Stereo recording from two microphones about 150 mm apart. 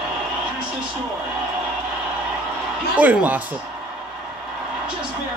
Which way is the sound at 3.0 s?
10° right (ahead or behind).